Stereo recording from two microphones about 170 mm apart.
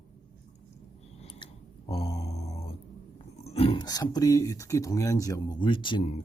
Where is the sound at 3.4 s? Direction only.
35° left (ahead or behind).